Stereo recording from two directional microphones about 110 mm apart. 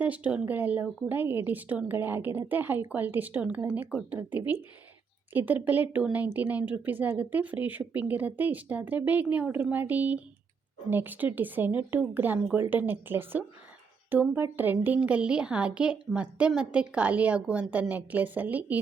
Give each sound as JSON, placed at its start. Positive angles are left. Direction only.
{"t": 0.0, "sound": "speech", "side_deg": -15}